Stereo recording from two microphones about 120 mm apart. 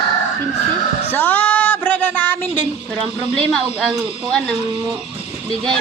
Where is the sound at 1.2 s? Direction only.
15° left (ahead or behind).